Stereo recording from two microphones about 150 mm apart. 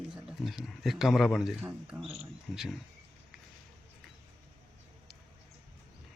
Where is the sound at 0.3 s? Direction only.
5° right (ahead or behind).